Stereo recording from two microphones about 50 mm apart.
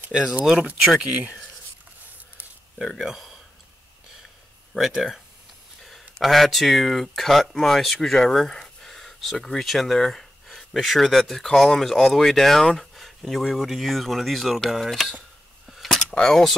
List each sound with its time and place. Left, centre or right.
0.1 s speech: centre
3.1 s speech: centre
4.7 s speech: centre
15.7 s a sound: centre
16.1 s speech: centre